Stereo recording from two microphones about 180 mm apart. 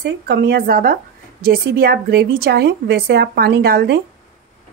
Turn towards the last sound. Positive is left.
turn(degrees=-60)  # may be behind; listen again after turning